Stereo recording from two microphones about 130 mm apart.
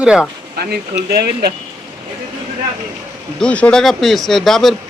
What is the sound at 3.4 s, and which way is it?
Speech, 10° left (ahead or behind).